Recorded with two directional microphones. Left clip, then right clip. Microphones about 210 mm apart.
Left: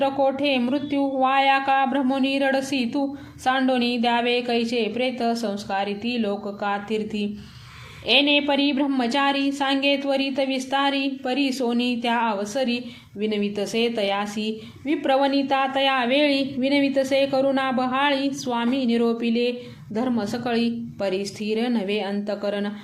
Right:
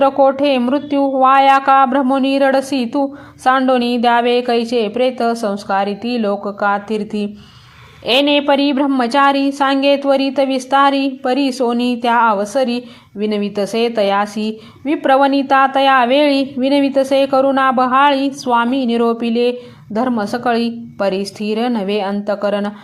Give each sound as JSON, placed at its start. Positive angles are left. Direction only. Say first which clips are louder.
{"t": 0.0, "sound": "a woman's voice", "louder": "right 9 dB", "side_deg": -25}